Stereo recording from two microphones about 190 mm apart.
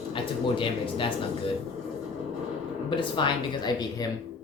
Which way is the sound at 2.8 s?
25° left (ahead or behind).